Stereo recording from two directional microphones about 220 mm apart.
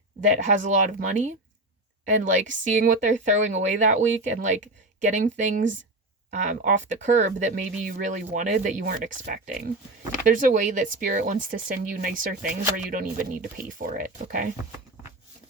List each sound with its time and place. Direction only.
0.4 s speech: 35° right (ahead or behind)